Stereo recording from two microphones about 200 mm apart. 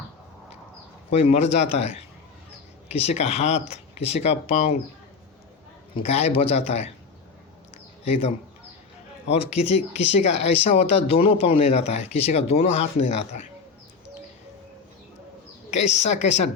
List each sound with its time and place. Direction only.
1.1 s speech: 30° left (ahead or behind)
6.0 s speech: 30° left (ahead or behind)
8.0 s speech: 30° left (ahead or behind)
15.7 s speech: 35° left (ahead or behind)